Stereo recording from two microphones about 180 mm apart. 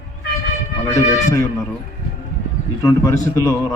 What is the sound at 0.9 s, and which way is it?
Speech, 15° left (ahead or behind).